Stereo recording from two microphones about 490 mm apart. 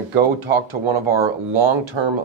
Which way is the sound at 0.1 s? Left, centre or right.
Right.